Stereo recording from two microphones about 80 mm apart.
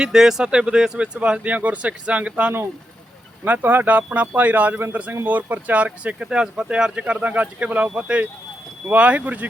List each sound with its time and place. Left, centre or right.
0.0 s speech: centre